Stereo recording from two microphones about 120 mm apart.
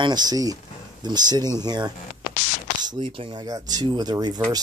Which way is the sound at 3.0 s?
45° right (ahead or behind).